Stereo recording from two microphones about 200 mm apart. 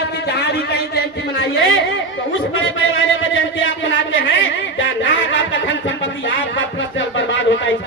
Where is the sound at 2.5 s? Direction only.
75° left (ahead or behind).